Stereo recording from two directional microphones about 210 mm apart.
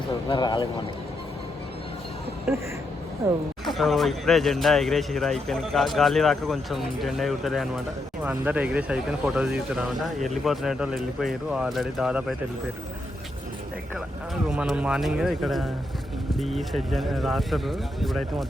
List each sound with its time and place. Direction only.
0.3 s speech: 20° left (ahead or behind)
3.2 s speech: 15° right (ahead or behind)
3.8 s speech: centre (ahead or behind)
14.4 s speech: centre (ahead or behind)